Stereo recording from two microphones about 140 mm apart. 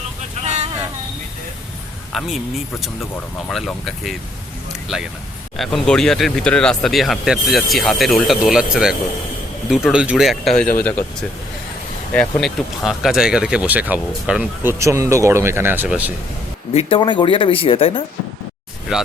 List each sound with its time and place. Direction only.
0.4 s vehicle: 55° right (ahead or behind)
2.1 s speech: centre (ahead or behind)
3.5 s speech: centre (ahead or behind)
5.5 s speech: 5° left (ahead or behind)
10.8 s speech: 10° left (ahead or behind); by 16.1 s 10° right (ahead or behind)
16.7 s speech: 40° left (ahead or behind)